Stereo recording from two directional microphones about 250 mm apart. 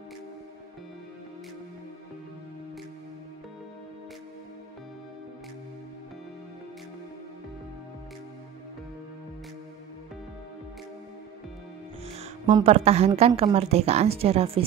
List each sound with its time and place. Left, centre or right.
12.2 s a woman's voice: right